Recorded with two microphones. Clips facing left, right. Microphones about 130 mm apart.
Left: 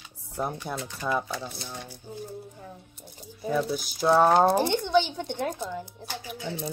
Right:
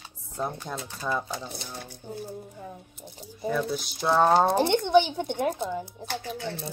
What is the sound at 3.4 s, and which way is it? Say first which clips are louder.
Speech: left 1 dB; 5° left (ahead or behind).